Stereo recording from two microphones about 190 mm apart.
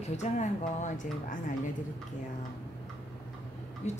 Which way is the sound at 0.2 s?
40° left (ahead or behind).